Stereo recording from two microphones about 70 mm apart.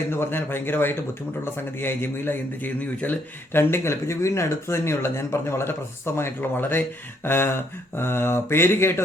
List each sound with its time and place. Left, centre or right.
0.1 s speech: left
3.6 s speech: left